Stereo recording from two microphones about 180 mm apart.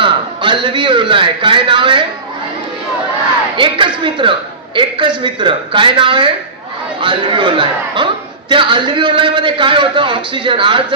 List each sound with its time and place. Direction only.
0.0 s a man's voice: 25° right (ahead or behind)
3.5 s a man's voice: 25° right (ahead or behind)